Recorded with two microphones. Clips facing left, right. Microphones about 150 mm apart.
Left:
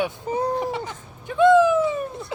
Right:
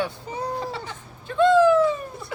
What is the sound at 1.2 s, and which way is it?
Cat, 15° left (ahead or behind).